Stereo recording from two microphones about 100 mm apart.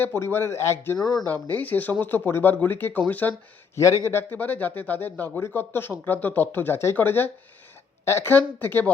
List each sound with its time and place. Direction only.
0.0 s speech: 20° left (ahead or behind)
0.9 s speech: 5° left (ahead or behind)
1.3 s speech: 15° left (ahead or behind)